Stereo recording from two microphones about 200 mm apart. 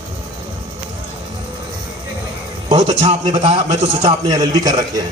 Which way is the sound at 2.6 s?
35° right (ahead or behind).